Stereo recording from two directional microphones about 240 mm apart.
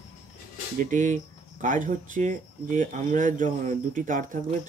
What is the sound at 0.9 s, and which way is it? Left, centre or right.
Speech, right.